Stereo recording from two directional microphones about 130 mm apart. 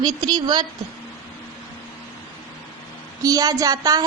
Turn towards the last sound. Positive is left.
turn(degrees=-30)  # may be behind; listen again after turning